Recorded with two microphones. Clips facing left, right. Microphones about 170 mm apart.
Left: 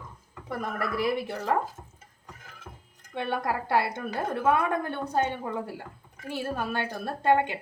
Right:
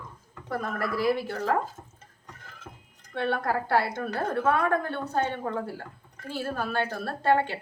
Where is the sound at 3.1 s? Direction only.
15° left (ahead or behind).